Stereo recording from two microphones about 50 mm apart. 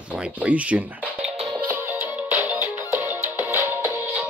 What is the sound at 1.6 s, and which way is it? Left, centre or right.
Music, right.